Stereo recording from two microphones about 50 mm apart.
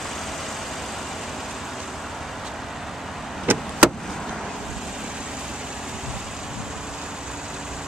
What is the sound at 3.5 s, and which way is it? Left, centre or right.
Vehicle, right.